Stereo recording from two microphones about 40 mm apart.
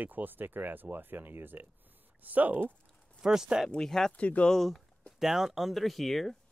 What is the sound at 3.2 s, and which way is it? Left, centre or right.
Speech, centre.